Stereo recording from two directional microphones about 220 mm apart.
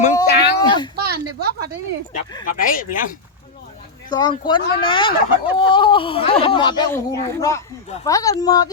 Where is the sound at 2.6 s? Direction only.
40° left (ahead or behind).